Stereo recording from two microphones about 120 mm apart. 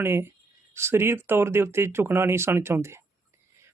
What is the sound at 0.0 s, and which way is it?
Speech, 20° right (ahead or behind).